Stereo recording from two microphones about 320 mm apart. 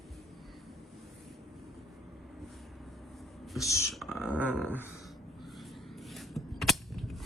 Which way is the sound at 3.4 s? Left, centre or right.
Centre.